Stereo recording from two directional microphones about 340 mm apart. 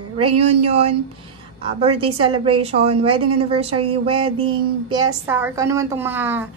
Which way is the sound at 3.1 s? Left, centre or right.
Right.